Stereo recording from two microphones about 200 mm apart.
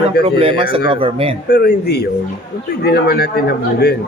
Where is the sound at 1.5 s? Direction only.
55° left (ahead or behind).